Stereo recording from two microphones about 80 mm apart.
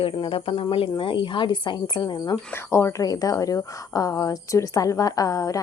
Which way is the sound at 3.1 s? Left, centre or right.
Left.